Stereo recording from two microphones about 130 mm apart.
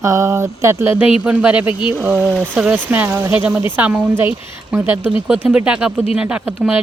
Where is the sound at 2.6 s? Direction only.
10° right (ahead or behind).